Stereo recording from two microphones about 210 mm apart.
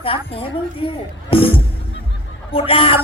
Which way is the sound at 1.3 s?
25° left (ahead or behind).